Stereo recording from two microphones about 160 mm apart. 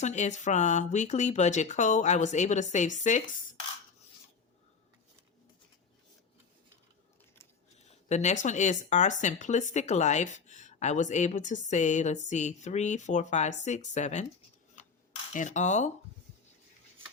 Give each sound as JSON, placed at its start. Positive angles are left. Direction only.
{"t": 0.0, "sound": "speech", "side_deg": 45}
{"t": 7.9, "sound": "speech", "side_deg": 45}
{"t": 14.8, "sound": "cutlery", "side_deg": 50}
{"t": 15.3, "sound": "speech", "side_deg": 50}